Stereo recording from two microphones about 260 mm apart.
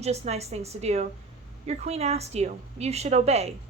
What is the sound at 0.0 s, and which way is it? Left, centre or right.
A woman's voice, right.